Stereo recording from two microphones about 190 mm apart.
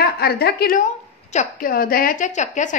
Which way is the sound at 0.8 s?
40° left (ahead or behind).